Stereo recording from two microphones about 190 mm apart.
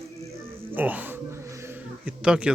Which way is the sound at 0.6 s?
10° right (ahead or behind).